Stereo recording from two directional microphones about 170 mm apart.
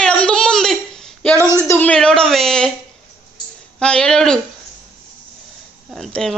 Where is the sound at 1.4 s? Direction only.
15° right (ahead or behind).